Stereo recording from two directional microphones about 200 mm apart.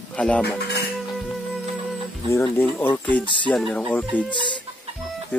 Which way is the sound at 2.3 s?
10° left (ahead or behind).